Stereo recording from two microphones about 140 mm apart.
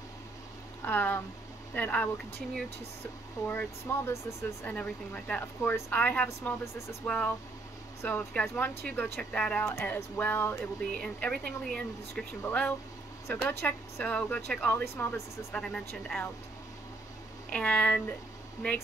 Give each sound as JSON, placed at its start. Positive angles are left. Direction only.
{"t": 0.8, "sound": "speech", "side_deg": 15}
{"t": 3.4, "sound": "speech", "side_deg": 15}
{"t": 17.5, "sound": "speech", "side_deg": 10}